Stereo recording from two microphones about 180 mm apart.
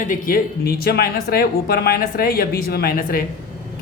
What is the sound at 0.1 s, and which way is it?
Speech, 50° left (ahead or behind).